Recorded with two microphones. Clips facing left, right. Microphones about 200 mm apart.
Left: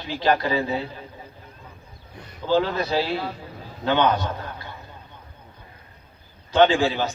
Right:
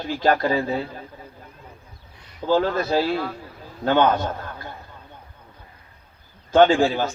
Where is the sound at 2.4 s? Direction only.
45° right (ahead or behind).